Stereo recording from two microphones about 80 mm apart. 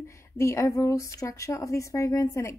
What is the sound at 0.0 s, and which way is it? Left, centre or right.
A woman's voice, left.